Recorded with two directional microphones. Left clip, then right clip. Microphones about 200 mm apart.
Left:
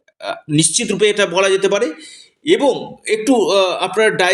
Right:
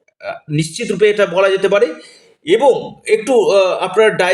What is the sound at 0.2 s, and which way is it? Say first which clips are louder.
A man's voice: left 4 dB; 35° left (ahead or behind).